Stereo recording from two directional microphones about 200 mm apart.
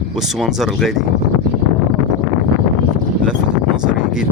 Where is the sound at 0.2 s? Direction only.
Centre (ahead or behind).